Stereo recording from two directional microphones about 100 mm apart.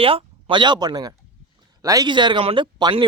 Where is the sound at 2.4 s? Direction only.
65° right (ahead or behind).